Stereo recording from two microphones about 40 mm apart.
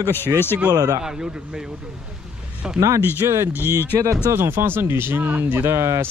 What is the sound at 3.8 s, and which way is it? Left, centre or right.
Speech, left.